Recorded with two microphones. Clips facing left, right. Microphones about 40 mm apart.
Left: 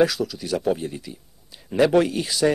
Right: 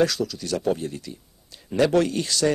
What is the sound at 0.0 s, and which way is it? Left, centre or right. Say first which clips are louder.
A man's voice: left 2 dB; centre.